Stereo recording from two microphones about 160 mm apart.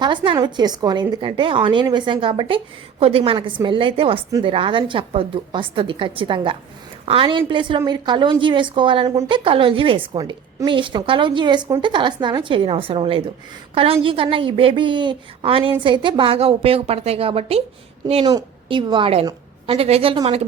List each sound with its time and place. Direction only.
0.0 s a woman's voice: 30° right (ahead or behind)
18.3 s a woman's voice: 25° right (ahead or behind)